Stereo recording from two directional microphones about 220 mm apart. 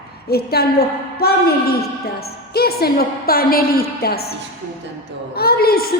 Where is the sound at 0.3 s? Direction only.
45° left (ahead or behind).